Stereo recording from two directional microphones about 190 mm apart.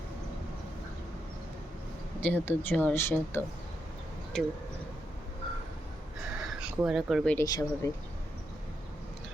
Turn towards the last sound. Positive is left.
turn(degrees=20)  # may be behind; listen again after turning